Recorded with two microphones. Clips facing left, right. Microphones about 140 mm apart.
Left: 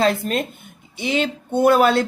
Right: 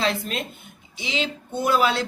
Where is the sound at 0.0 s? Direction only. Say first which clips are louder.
Left 6 dB; 50° left (ahead or behind).